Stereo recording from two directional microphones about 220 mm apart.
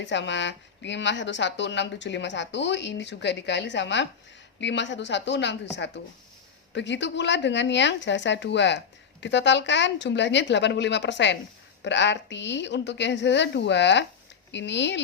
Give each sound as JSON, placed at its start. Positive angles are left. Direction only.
{"t": 0.0, "sound": "speech", "side_deg": 55}